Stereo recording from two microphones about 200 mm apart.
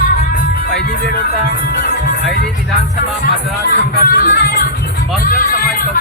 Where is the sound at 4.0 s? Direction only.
45° left (ahead or behind).